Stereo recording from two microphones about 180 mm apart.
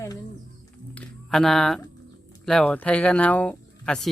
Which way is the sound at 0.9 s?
5° left (ahead or behind).